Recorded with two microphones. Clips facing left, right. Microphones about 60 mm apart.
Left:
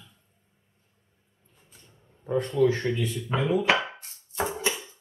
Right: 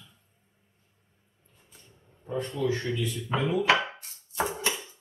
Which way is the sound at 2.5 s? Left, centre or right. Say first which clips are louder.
Left 7 dB; left.